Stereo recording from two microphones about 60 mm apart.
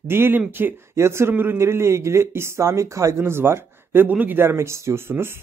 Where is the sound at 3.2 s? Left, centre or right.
Right.